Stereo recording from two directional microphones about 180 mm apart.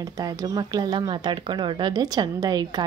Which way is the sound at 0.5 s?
20° right (ahead or behind).